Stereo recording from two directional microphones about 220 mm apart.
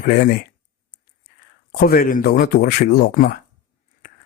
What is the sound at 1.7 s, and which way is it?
A man's voice, 40° left (ahead or behind).